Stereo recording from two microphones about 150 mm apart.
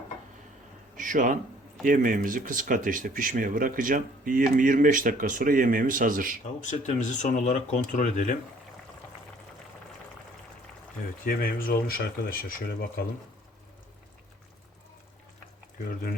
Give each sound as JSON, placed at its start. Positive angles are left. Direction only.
{"t": 0.9, "sound": "a sound", "side_deg": -60}
{"t": 1.8, "sound": "speech", "side_deg": -65}
{"t": 6.6, "sound": "speech", "side_deg": 55}
{"t": 11.3, "sound": "speech", "side_deg": 75}